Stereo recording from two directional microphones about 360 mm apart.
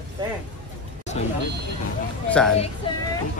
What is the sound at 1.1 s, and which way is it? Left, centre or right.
Speech, centre.